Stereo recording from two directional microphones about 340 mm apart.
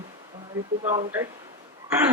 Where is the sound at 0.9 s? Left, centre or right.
Centre.